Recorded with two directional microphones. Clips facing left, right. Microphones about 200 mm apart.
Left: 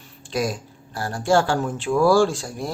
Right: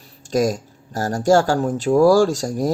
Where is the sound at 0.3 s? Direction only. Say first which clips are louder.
Right 6 dB; 45° right (ahead or behind).